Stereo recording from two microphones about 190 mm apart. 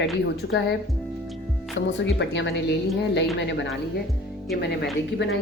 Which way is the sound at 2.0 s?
70° left (ahead or behind).